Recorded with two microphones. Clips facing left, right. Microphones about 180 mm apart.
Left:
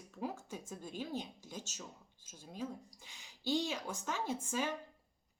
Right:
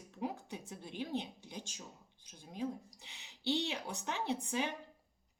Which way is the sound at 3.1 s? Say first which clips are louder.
Even; 45° left (ahead or behind).